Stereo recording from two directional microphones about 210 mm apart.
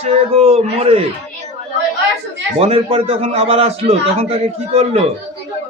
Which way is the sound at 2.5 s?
30° right (ahead or behind).